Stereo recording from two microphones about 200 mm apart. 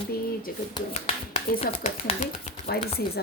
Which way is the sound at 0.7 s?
25° left (ahead or behind).